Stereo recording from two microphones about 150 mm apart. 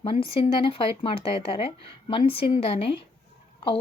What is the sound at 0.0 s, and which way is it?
Speech, 35° left (ahead or behind).